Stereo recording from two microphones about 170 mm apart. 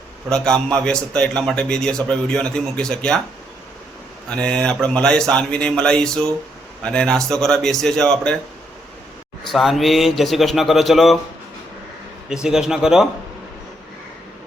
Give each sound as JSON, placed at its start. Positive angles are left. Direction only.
{"t": 0.3, "sound": "speech", "side_deg": 5}
{"t": 4.3, "sound": "speech", "side_deg": 5}
{"t": 9.5, "sound": "speech", "side_deg": 0}
{"t": 12.3, "sound": "speech", "side_deg": -5}